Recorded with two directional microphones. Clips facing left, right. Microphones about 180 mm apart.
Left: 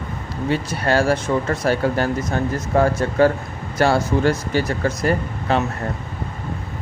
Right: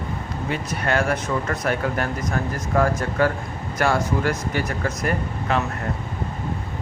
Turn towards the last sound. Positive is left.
turn(degrees=30)  # may be behind; listen again after turning